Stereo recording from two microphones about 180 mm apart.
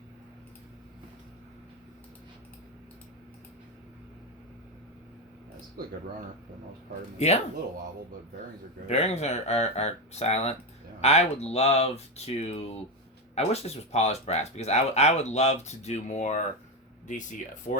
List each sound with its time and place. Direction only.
7.2 s speech: 40° left (ahead or behind)
8.9 s speech: 35° left (ahead or behind)
17.7 s speech: 45° left (ahead or behind)